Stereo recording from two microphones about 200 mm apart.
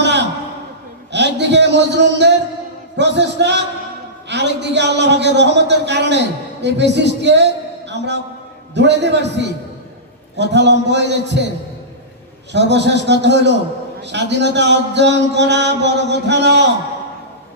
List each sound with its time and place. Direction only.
0.0 s a sound: 60° right (ahead or behind)
2.9 s a man's voice: 60° right (ahead or behind)
12.5 s speech: 60° right (ahead or behind)